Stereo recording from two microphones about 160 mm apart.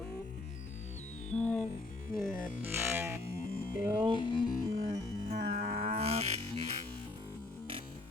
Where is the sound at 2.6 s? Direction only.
15° right (ahead or behind).